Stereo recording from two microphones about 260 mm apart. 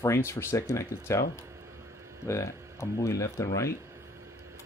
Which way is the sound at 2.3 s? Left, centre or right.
Centre.